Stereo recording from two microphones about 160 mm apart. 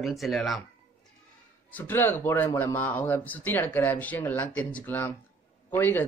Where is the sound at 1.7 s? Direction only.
10° left (ahead or behind).